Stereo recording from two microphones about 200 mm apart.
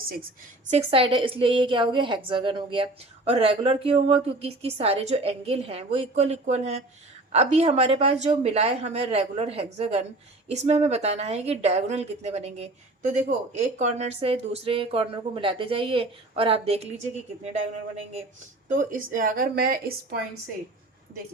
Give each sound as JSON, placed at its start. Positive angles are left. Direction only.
{"t": 0.7, "sound": "a woman's voice", "side_deg": -30}
{"t": 18.7, "sound": "a woman's voice", "side_deg": -40}